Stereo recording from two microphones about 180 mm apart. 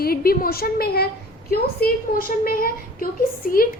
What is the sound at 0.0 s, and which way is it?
A woman's voice, 55° left (ahead or behind).